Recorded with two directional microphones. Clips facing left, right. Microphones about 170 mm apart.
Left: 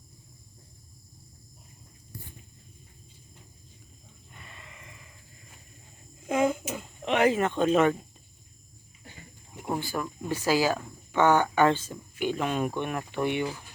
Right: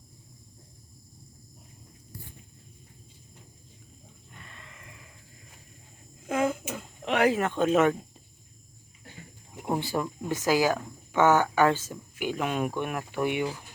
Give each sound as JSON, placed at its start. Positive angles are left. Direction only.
{"t": 4.4, "sound": "gasp", "side_deg": 10}
{"t": 6.3, "sound": "a child's voice", "side_deg": 0}
{"t": 9.6, "sound": "speech", "side_deg": -20}